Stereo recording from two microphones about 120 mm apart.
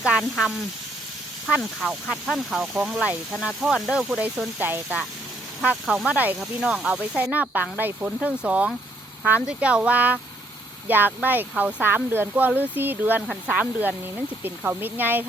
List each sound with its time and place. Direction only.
0.0 s speech: 5° right (ahead or behind)
2.0 s speech: 5° left (ahead or behind); by 4.9 s 15° right (ahead or behind)
5.8 s speech: centre (ahead or behind)